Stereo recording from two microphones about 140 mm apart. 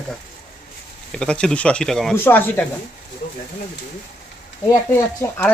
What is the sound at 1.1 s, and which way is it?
Speech, 5° left (ahead or behind).